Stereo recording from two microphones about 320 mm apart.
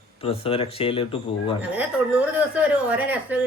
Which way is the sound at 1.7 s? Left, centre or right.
Centre.